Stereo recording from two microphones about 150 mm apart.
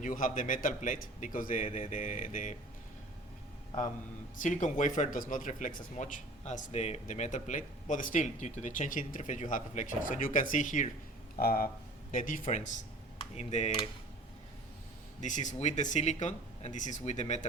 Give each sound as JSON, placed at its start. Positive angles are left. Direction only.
{"t": 0.0, "sound": "speech", "side_deg": 65}
{"t": 4.4, "sound": "speech", "side_deg": 55}
{"t": 11.3, "sound": "speech", "side_deg": 85}
{"t": 12.1, "sound": "speech", "side_deg": 65}
{"t": 15.2, "sound": "speech", "side_deg": 55}